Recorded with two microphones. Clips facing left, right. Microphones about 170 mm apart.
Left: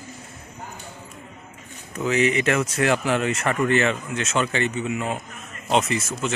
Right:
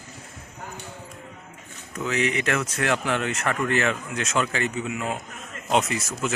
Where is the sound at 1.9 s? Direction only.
Centre (ahead or behind).